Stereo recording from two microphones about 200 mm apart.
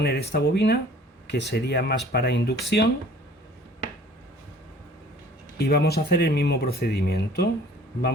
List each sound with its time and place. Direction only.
0.0 s speech: 55° left (ahead or behind)
5.5 s speech: 50° left (ahead or behind)